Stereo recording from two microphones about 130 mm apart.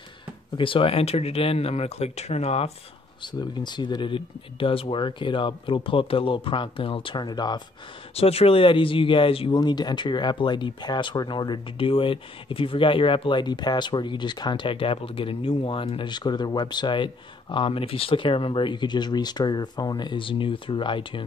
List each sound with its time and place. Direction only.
0.6 s speech: 40° left (ahead or behind)
3.2 s speech: 35° left (ahead or behind)
8.1 s speech: 50° left (ahead or behind)